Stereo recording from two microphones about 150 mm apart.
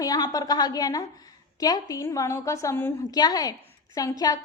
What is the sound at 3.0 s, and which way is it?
A woman's voice, 25° left (ahead or behind).